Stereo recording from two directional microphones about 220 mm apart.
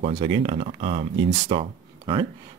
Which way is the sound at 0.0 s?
25° right (ahead or behind).